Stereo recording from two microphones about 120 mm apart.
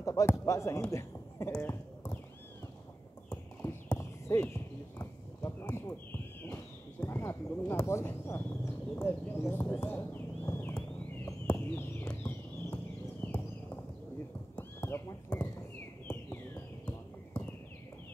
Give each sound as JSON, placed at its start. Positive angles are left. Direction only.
{"t": 0.0, "sound": "a sound", "side_deg": 25}
{"t": 0.3, "sound": "speech", "side_deg": 20}
{"t": 1.5, "sound": "clip-clop", "side_deg": 20}
{"t": 4.0, "sound": "horse", "side_deg": 20}
{"t": 4.9, "sound": "a sound", "side_deg": 20}
{"t": 14.5, "sound": "horse", "side_deg": 20}